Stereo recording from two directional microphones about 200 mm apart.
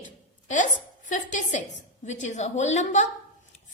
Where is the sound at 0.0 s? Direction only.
40° left (ahead or behind).